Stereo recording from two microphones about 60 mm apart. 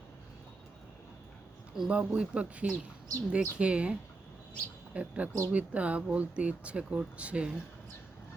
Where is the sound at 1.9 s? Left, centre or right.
Centre.